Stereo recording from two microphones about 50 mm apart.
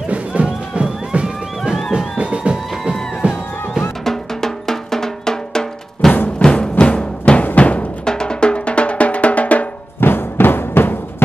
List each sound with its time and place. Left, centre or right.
0.1 s music: right
1.6 s music: centre
2.1 s music: right
2.8 s music: centre
4.0 s drum: centre
6.4 s music: centre
8.0 s music: centre
9.9 s music: left